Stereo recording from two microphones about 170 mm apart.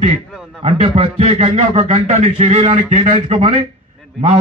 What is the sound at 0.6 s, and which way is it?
Speech, 35° right (ahead or behind).